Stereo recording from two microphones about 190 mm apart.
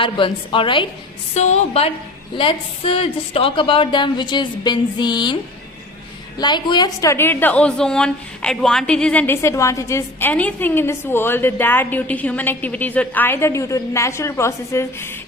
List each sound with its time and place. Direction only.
0.0 s a woman's voice: 25° left (ahead or behind)
1.3 s a woman's voice: 35° left (ahead or behind)
6.4 s a woman's voice: 20° left (ahead or behind)